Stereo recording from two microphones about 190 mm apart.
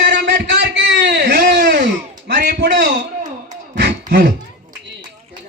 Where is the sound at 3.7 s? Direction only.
65° right (ahead or behind).